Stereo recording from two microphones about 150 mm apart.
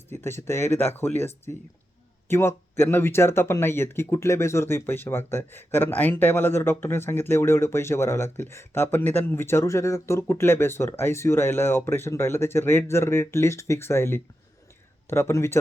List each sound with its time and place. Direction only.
0.1 s speech: 15° left (ahead or behind)